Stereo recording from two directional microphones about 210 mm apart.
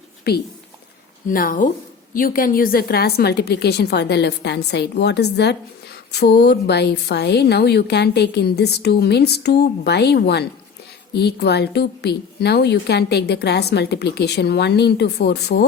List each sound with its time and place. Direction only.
1.3 s speech: 40° left (ahead or behind)